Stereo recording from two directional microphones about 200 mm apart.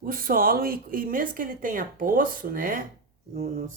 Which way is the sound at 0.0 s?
45° right (ahead or behind).